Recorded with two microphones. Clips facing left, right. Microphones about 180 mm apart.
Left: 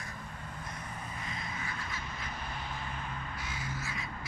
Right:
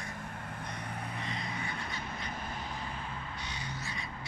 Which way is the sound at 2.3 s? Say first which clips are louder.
Right 1 dB; 45° right (ahead or behind).